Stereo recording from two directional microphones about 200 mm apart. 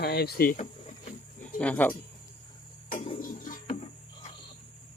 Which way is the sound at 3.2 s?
40° left (ahead or behind).